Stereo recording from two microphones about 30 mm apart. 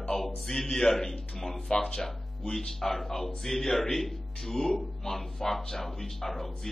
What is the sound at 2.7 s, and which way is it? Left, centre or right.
Speech, centre.